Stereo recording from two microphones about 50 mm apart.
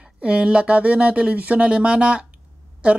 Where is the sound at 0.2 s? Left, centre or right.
Right.